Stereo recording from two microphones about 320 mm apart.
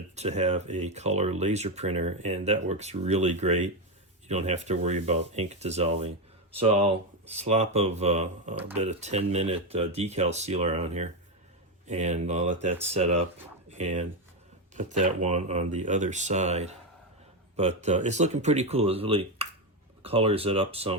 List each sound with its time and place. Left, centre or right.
0.2 s speech: right
13.7 s a sound: right
14.8 s speech: right